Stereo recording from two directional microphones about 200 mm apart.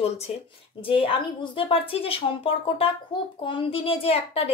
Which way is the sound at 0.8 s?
25° left (ahead or behind).